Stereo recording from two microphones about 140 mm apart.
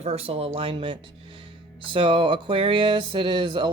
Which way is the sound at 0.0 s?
45° right (ahead or behind).